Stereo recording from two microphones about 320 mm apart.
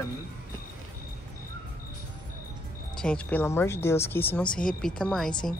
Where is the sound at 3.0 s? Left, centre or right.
Centre.